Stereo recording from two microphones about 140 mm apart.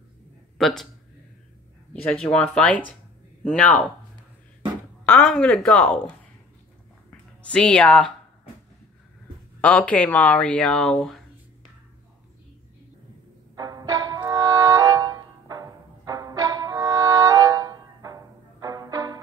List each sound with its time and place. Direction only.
0.6 s speech: centre (ahead or behind)
2.0 s speech: 5° left (ahead or behind)
5.0 s a sound: 10° left (ahead or behind)
5.3 s speech: 5° left (ahead or behind)
7.1 s a sound: 10° left (ahead or behind)
9.6 s speech: 10° left (ahead or behind)
13.6 s music: 25° right (ahead or behind)